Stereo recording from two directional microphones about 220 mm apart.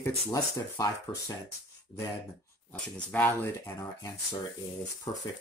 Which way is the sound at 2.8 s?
5° left (ahead or behind).